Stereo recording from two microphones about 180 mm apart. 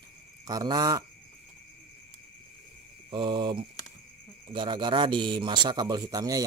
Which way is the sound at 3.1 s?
25° right (ahead or behind).